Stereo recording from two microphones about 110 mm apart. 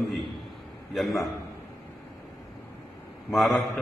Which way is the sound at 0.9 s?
Centre (ahead or behind).